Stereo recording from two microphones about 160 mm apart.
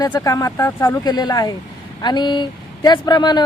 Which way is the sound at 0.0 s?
25° left (ahead or behind).